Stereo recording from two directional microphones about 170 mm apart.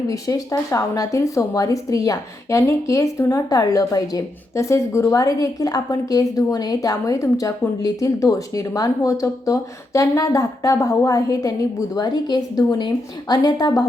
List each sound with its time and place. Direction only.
0.1 s speech: 20° left (ahead or behind)